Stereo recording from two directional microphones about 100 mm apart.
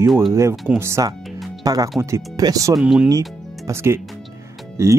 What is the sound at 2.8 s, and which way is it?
Speech, 10° right (ahead or behind).